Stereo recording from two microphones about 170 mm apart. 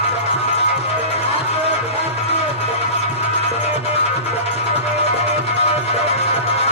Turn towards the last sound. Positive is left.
turn(degrees=35)  # may be behind; listen again after turning